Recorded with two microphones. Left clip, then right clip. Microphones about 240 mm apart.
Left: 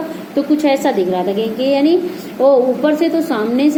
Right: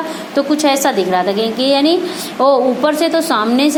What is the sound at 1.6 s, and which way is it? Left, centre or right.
Speech, right.